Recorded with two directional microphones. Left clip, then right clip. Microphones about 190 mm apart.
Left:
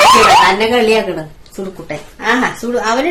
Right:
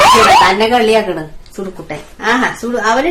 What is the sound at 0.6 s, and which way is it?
A woman's voice, 10° right (ahead or behind).